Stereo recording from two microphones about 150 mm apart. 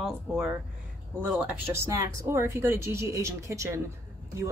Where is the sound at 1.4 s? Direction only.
15° right (ahead or behind).